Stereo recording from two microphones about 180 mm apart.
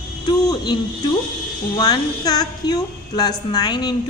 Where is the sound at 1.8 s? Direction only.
20° left (ahead or behind).